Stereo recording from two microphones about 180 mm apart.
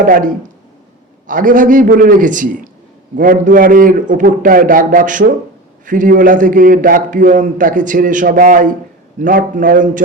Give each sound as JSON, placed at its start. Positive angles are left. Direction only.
{"t": 0.0, "sound": "a man's voice", "side_deg": -50}